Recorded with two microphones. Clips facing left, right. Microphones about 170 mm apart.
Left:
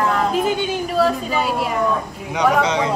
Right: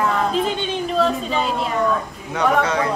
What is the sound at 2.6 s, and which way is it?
Speech, 20° left (ahead or behind).